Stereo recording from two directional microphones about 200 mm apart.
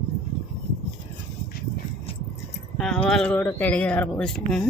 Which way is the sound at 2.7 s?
Centre (ahead or behind).